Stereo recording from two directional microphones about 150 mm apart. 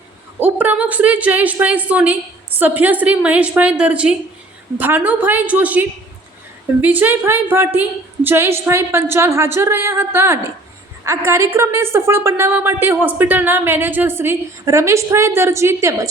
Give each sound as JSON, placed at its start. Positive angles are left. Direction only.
{"t": 0.3, "sound": "a woman's voice", "side_deg": -15}
{"t": 6.8, "sound": "a woman's voice", "side_deg": -10}